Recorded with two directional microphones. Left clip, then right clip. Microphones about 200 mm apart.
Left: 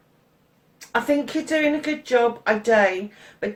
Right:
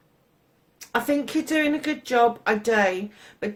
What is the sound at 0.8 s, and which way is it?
Speech, 45° right (ahead or behind).